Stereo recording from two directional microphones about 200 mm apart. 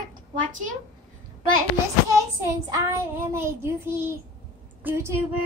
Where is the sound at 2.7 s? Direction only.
10° right (ahead or behind).